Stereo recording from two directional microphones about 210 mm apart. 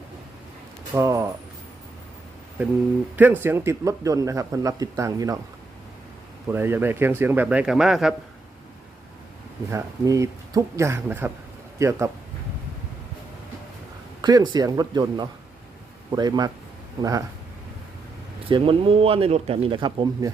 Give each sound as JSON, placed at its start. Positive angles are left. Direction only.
{"t": 0.9, "sound": "speech", "side_deg": -15}
{"t": 3.2, "sound": "speech", "side_deg": -10}
{"t": 6.5, "sound": "speech", "side_deg": -10}
{"t": 9.7, "sound": "speech", "side_deg": -15}
{"t": 14.2, "sound": "speech", "side_deg": -20}
{"t": 18.4, "sound": "speech", "side_deg": -25}